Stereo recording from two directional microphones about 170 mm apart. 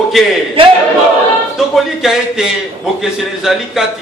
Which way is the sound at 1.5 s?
Centre (ahead or behind).